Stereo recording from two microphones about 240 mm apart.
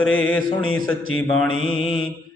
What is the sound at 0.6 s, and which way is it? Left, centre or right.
Speech, left.